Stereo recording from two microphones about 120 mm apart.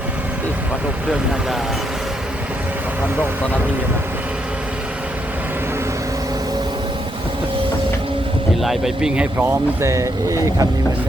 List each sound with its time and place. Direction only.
8.6 s speech: centre (ahead or behind); by 10.7 s 25° right (ahead or behind)